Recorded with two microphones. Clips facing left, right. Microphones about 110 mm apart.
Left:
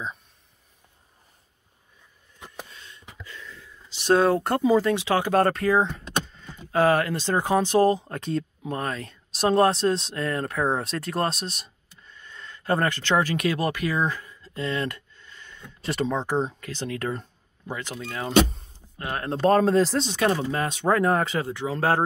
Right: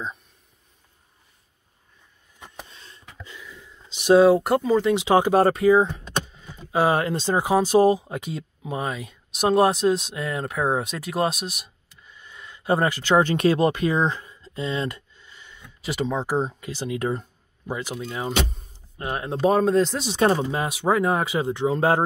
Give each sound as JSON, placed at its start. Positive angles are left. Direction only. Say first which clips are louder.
{"t": 2.7, "sound": "a sound", "louder": "left 1 dB", "side_deg": -30}
{"t": 3.3, "sound": "a sound", "louder": "left 1 dB", "side_deg": -15}
{"t": 4.9, "sound": "speech", "louder": "right 4 dB", "side_deg": -20}
{"t": 5.7, "sound": "power windows", "louder": "right 5 dB", "side_deg": -5}
{"t": 7.4, "sound": "speech", "louder": "right 3 dB", "side_deg": -10}
{"t": 12.2, "sound": "a sound", "louder": "even", "side_deg": -15}
{"t": 13.2, "sound": "speech", "louder": "right 5 dB", "side_deg": -30}
{"t": 19.2, "sound": "speech", "louder": "even", "side_deg": -5}
{"t": 20.3, "sound": "speech", "louder": "right 1 dB", "side_deg": -15}